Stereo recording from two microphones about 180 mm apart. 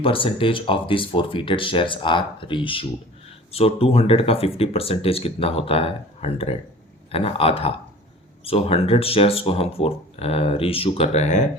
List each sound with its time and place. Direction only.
0.0 s speech: 30° left (ahead or behind)